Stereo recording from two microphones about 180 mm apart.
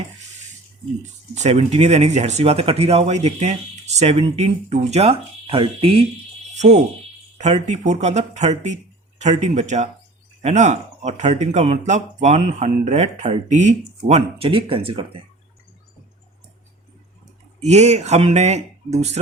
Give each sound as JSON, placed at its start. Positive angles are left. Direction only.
{"t": 1.0, "sound": "speech", "side_deg": -40}
{"t": 6.5, "sound": "a sound", "side_deg": -40}
{"t": 7.3, "sound": "speech", "side_deg": -40}
{"t": 17.6, "sound": "speech", "side_deg": -40}